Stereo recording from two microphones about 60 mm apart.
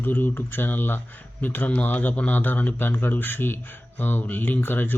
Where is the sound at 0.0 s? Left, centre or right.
Left.